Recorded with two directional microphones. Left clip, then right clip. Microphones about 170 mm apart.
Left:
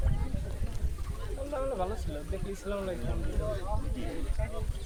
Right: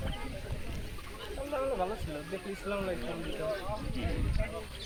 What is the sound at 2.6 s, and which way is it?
Speech, 25° right (ahead or behind).